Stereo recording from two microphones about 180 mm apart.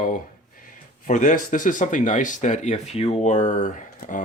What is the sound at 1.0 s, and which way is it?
Speech, 45° left (ahead or behind).